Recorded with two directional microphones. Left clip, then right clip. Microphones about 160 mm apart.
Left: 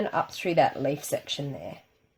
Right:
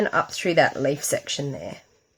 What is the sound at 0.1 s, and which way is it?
Speech, 45° right (ahead or behind).